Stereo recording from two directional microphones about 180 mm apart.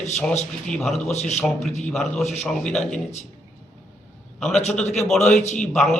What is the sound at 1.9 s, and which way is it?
A man's voice, centre (ahead or behind).